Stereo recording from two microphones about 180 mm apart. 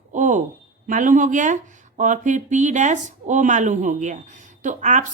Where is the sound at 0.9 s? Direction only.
45° right (ahead or behind).